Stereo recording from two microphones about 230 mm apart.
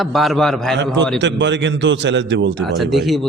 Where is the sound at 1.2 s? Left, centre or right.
Right.